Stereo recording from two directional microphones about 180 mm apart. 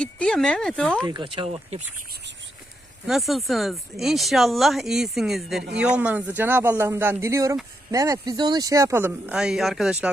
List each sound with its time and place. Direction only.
0.0 s speech: 5° left (ahead or behind)
1.0 s speech: 25° right (ahead or behind)
3.1 s speech: centre (ahead or behind)